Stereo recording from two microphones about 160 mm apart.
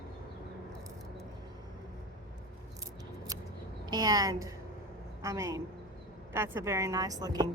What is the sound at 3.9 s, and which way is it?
Speech, 25° right (ahead or behind).